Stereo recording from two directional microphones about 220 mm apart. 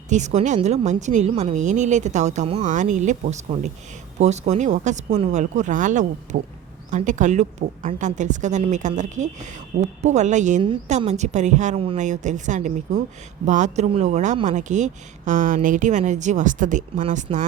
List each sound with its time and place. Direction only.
0.1 s speech: 30° right (ahead or behind)